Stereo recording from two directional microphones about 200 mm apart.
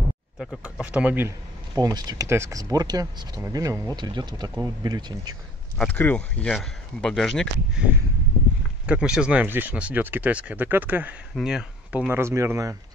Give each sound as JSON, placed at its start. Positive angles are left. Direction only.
{"t": 0.4, "sound": "speech", "side_deg": 0}
{"t": 5.8, "sound": "speech", "side_deg": 10}